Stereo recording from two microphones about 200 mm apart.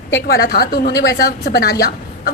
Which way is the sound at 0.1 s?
50° left (ahead or behind).